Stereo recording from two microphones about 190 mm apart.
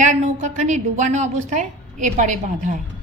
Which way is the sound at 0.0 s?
40° right (ahead or behind).